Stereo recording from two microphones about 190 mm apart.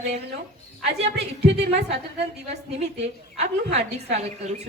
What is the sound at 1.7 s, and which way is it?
Speech, 35° right (ahead or behind).